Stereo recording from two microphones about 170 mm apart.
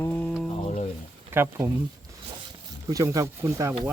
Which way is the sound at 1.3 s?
15° right (ahead or behind).